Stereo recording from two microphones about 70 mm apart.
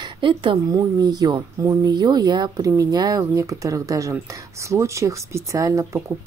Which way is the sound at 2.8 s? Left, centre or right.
Right.